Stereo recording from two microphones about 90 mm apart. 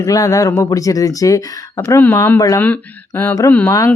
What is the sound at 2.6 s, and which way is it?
Speech, 20° left (ahead or behind).